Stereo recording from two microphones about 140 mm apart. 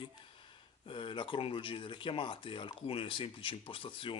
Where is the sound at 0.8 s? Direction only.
35° left (ahead or behind).